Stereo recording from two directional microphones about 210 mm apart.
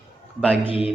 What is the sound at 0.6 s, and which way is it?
Speech, 25° left (ahead or behind).